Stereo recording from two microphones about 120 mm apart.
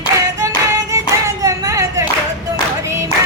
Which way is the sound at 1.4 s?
30° right (ahead or behind).